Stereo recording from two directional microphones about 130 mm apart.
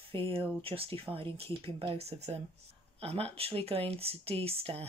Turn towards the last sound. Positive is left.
turn(degrees=-50)  # may be behind; listen again after turning